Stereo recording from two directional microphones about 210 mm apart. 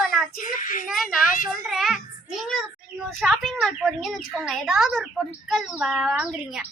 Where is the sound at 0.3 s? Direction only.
40° left (ahead or behind).